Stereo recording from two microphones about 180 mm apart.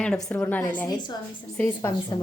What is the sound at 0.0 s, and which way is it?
A woman's voice, 5° left (ahead or behind).